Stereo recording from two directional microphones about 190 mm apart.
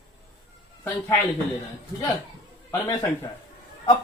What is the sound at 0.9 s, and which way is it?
Speech, 10° left (ahead or behind).